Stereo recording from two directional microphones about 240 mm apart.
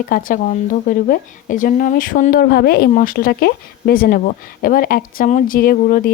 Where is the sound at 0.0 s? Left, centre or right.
Left.